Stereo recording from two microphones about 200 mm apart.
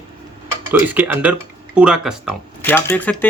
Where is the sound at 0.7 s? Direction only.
10° right (ahead or behind).